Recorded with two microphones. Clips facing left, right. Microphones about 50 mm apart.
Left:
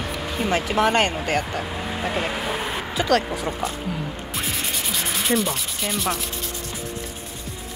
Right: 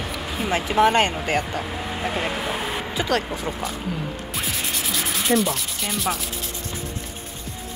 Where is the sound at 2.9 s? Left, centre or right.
Right.